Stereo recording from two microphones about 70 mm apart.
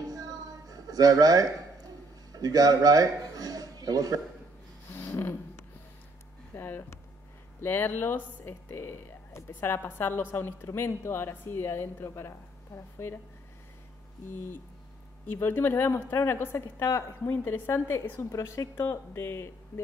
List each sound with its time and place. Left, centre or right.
0.1 s music: right
2.3 s a man's voice: right
4.9 s a sound: left
6.5 s speech: left
15.2 s speech: left
17.3 s speech: left
18.3 s speech: left